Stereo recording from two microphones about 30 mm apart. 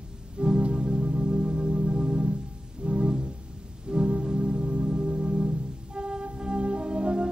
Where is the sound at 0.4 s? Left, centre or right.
Right.